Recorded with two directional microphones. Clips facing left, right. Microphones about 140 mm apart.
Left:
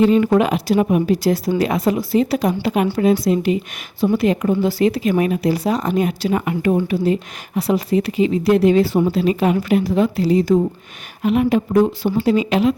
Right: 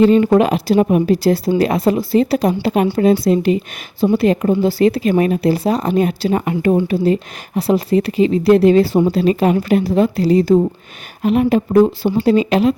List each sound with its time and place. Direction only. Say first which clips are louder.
0.2 s a woman's voice: right 3 dB; 35° right (ahead or behind)